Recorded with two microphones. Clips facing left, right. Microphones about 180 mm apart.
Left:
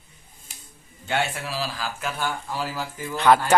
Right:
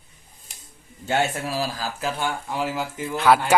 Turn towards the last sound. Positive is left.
turn(degrees=-5)  # may be behind; listen again after turning